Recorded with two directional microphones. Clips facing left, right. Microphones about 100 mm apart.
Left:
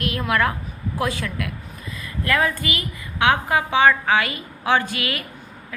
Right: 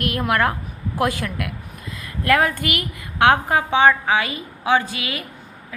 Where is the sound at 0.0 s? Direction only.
55° right (ahead or behind).